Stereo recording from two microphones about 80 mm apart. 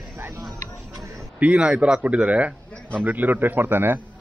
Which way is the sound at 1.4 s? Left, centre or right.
Centre.